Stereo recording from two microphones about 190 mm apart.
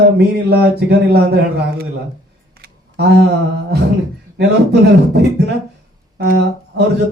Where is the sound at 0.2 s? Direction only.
60° right (ahead or behind).